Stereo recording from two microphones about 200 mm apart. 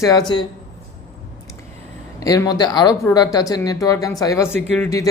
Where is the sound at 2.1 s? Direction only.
15° left (ahead or behind).